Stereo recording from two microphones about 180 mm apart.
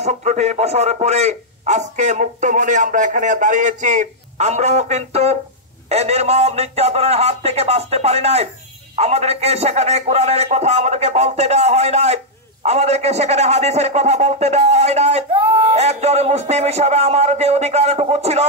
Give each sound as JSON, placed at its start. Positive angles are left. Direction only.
{"t": 0.0, "sound": "a man's voice", "side_deg": -40}